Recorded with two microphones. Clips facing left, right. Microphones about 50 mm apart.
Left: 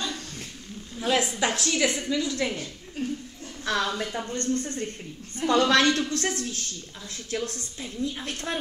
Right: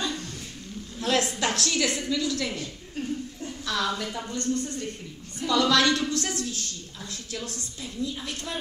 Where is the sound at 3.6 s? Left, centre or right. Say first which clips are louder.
Left 2 dB; left.